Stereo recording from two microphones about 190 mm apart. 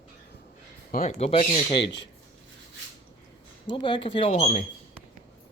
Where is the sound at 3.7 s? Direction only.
25° left (ahead or behind).